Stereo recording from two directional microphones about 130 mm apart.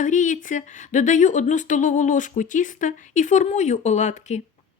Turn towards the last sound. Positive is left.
turn(degrees=65)  # may be behind; listen again after turning